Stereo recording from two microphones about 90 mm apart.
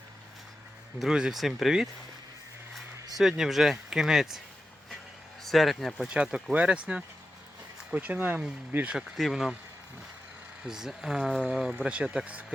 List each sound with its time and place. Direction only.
0.9 s speech: 5° right (ahead or behind)
3.2 s speech: 5° right (ahead or behind)
5.4 s speech: centre (ahead or behind)
6.1 s speech: 10° right (ahead or behind)
9.0 s speech: centre (ahead or behind)
10.7 s speech: 5° right (ahead or behind)